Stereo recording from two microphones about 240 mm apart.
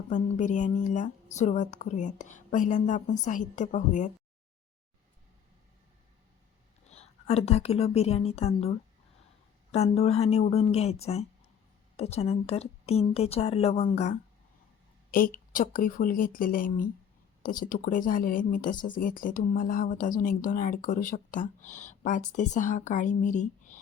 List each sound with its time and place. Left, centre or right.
0.1 s speech: left
6.9 s a woman's voice: left